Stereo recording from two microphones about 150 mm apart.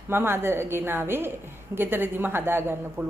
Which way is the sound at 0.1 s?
15° right (ahead or behind).